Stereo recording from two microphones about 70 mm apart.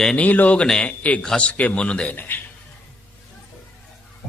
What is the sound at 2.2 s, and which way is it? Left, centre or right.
Speech, left.